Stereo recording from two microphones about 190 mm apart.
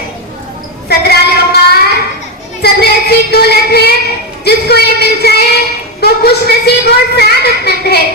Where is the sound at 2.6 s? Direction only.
55° left (ahead or behind).